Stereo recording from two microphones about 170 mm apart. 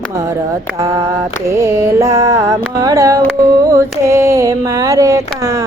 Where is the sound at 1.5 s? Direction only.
15° right (ahead or behind).